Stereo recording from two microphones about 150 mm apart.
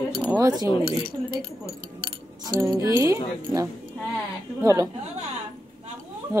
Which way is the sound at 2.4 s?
20° right (ahead or behind).